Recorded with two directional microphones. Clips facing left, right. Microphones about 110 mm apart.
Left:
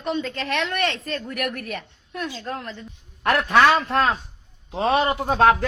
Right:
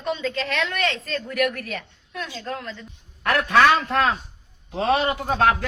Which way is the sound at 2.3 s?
25° left (ahead or behind).